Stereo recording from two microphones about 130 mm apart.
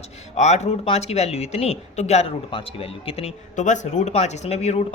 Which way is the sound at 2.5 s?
45° left (ahead or behind).